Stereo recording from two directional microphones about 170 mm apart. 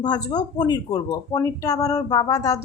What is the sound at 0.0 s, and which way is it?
A woman's voice, 25° left (ahead or behind).